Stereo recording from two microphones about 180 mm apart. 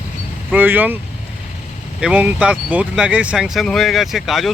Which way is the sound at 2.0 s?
5° right (ahead or behind).